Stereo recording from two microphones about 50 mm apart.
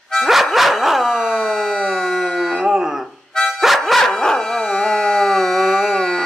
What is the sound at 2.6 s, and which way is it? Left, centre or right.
Livestock, centre.